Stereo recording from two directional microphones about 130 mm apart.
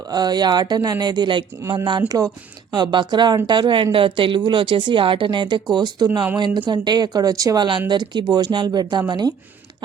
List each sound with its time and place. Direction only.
0.1 s a woman's voice: 30° right (ahead or behind)